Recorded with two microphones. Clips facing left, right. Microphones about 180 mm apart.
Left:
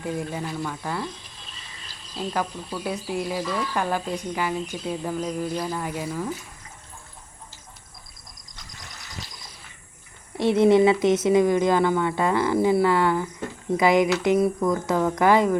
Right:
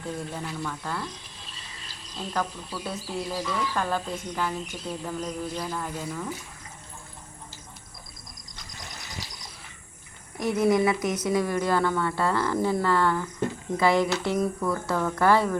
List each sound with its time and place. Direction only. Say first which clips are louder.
0.0 s speech: left 4 dB; 10° left (ahead or behind)
2.1 s speech: left 3 dB; 10° left (ahead or behind)
10.3 s speech: left 5 dB; 25° left (ahead or behind)